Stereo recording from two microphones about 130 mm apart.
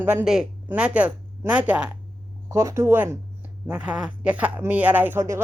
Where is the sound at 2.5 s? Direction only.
20° right (ahead or behind).